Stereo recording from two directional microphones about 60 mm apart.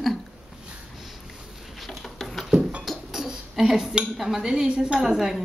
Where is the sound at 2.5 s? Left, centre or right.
Centre.